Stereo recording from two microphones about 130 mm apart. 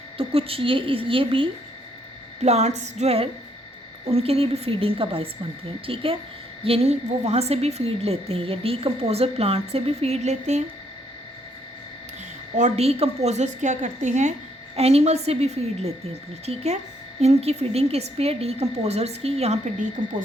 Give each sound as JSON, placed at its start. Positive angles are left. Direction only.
{"t": 0.2, "sound": "a woman's voice", "side_deg": -45}
{"t": 2.4, "sound": "a woman's voice", "side_deg": -55}
{"t": 12.5, "sound": "a woman's voice", "side_deg": -60}
{"t": 14.8, "sound": "a woman's voice", "side_deg": -50}
{"t": 20.0, "sound": "a woman's voice", "side_deg": -45}